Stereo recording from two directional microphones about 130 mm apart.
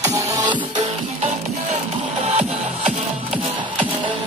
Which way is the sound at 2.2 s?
55° right (ahead or behind).